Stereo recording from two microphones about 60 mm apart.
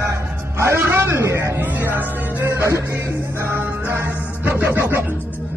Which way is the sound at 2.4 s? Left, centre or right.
Right.